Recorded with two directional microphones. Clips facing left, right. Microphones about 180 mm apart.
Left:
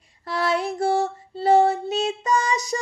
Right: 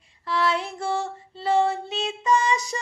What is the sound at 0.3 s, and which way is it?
Female singing, 40° left (ahead or behind).